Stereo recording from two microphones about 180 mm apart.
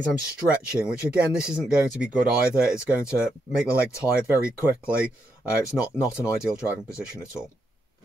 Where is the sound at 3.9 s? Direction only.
15° left (ahead or behind).